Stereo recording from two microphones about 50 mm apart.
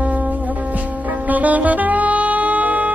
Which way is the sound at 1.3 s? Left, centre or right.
Right.